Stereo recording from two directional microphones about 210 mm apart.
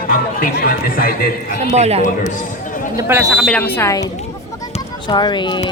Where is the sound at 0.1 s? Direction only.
40° left (ahead or behind).